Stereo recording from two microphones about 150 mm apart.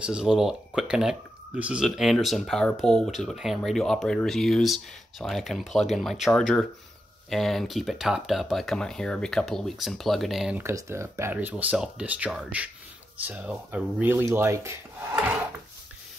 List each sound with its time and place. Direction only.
0.0 s speech: 5° right (ahead or behind)
10.6 s speech: 20° right (ahead or behind)